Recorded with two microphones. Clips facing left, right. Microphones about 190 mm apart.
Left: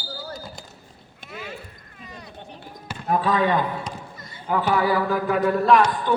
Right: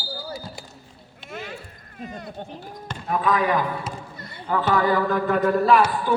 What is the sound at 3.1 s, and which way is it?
Speech, 30° left (ahead or behind).